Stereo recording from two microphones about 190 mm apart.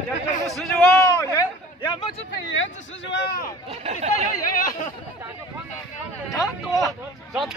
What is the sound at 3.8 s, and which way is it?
Speech, 35° right (ahead or behind).